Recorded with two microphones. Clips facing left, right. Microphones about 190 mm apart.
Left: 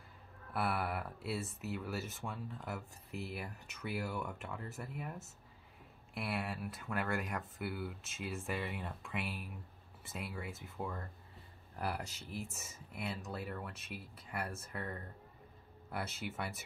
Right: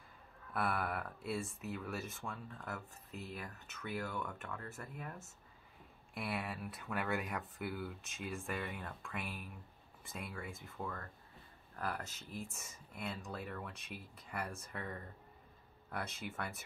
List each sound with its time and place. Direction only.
0.5 s speech: 5° left (ahead or behind)